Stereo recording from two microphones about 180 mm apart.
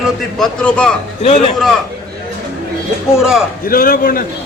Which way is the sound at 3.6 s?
55° left (ahead or behind).